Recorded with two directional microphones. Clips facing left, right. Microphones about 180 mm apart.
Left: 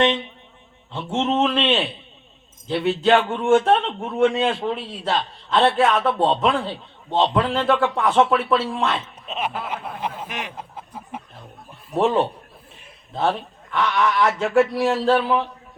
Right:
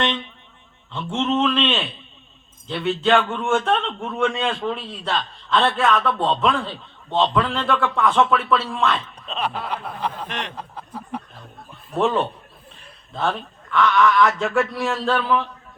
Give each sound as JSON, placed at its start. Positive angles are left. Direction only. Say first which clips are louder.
{"t": 0.9, "sound": "a man's voice", "louder": "left 1 dB", "side_deg": 20}
{"t": 9.2, "sound": "chuckle", "louder": "right 1 dB", "side_deg": 20}
{"t": 9.6, "sound": "a man's voice", "louder": "right 1 dB", "side_deg": 20}
{"t": 10.2, "sound": "speech", "louder": "right 1 dB", "side_deg": 10}
{"t": 10.6, "sound": "a man's voice", "louder": "right 2 dB", "side_deg": 20}